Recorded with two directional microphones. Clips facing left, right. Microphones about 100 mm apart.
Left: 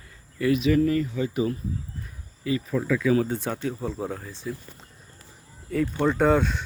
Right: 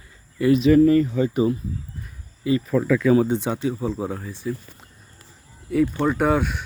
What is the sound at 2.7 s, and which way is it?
Speech, 70° right (ahead or behind).